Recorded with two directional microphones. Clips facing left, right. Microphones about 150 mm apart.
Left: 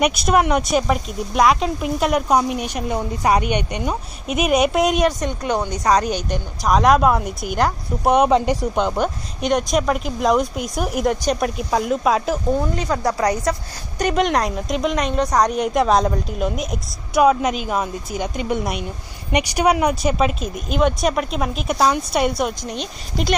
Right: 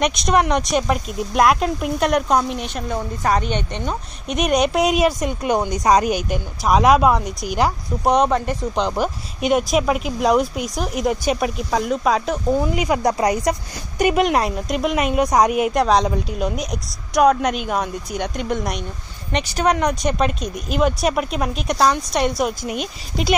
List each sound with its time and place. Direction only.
0.0 s a woman's voice: 5° left (ahead or behind)
8.3 s speech: 15° left (ahead or behind)
8.7 s a woman's voice: centre (ahead or behind)